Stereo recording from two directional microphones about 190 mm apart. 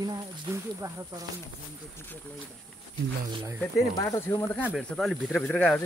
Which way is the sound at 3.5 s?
15° left (ahead or behind).